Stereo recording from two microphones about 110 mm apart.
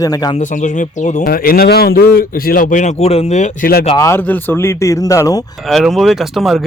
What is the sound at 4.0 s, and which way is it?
Speech, 25° left (ahead or behind).